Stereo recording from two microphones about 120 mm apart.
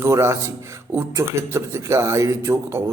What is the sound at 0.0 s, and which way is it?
A man's voice, 25° right (ahead or behind).